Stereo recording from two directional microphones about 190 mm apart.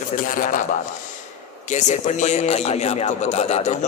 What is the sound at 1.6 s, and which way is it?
Music, 40° left (ahead or behind).